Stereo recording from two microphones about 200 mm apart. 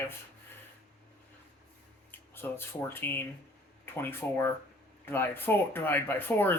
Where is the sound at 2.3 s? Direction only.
10° left (ahead or behind).